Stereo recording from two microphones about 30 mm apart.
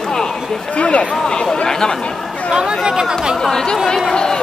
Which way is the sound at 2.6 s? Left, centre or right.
Right.